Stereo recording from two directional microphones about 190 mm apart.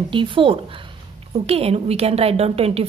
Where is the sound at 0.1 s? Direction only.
25° right (ahead or behind).